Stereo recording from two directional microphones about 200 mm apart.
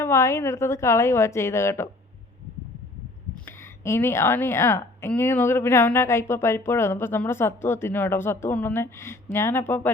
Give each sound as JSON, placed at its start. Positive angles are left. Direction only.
{"t": 0.0, "sound": "a woman's voice", "side_deg": 15}
{"t": 3.4, "sound": "a woman's voice", "side_deg": 10}